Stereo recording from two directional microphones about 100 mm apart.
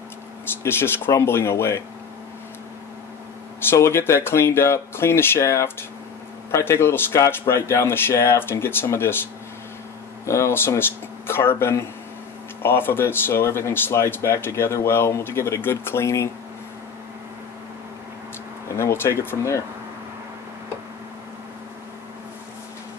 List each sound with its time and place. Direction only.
0.7 s speech: 25° left (ahead or behind)
3.7 s speech: 25° left (ahead or behind)
10.2 s speech: 30° left (ahead or behind)
18.8 s speech: 25° left (ahead or behind)